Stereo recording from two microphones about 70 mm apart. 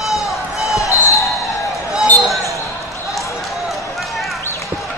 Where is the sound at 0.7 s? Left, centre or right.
Left.